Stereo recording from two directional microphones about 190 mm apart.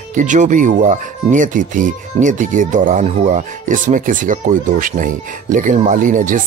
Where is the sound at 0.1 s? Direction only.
40° right (ahead or behind).